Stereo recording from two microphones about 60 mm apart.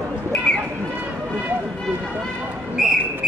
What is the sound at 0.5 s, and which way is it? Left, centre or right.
Bird, centre.